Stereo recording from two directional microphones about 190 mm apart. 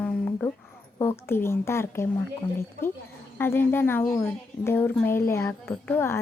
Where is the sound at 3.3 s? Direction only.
10° left (ahead or behind).